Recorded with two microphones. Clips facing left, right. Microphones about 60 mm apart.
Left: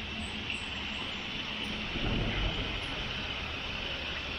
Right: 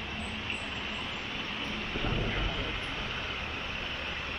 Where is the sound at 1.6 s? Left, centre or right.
Centre.